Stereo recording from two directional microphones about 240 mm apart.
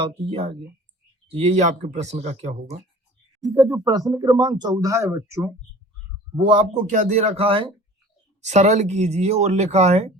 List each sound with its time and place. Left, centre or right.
0.0 s speech: right
3.4 s speech: centre